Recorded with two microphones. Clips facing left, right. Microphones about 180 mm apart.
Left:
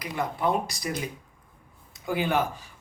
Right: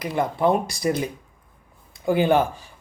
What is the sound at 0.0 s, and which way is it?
Speech, 30° right (ahead or behind).